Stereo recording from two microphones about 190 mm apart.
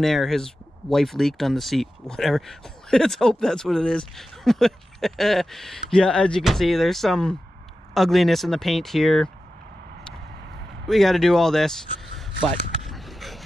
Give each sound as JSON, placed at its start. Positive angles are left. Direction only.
{"t": 0.0, "sound": "speech", "side_deg": 0}
{"t": 10.9, "sound": "speech", "side_deg": 0}
{"t": 12.2, "sound": "a sound", "side_deg": 0}